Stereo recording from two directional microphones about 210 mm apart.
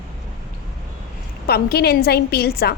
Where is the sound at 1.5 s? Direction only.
50° left (ahead or behind).